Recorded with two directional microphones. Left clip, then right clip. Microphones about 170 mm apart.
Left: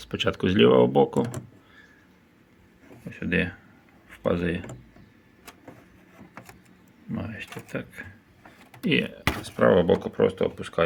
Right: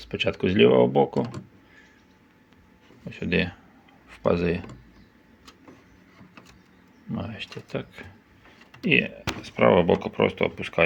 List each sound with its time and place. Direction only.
0.0 s speech: 20° left (ahead or behind)
3.1 s speech: 10° right (ahead or behind)
7.3 s speech: centre (ahead or behind)
8.9 s speech: 10° left (ahead or behind)